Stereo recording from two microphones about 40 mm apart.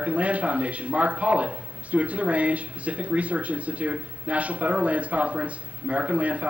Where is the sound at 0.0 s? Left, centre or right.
Right.